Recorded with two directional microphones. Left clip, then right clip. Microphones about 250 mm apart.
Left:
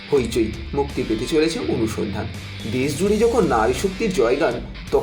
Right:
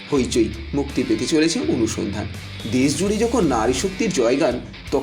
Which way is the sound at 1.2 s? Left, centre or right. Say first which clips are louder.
Left 1 dB; right.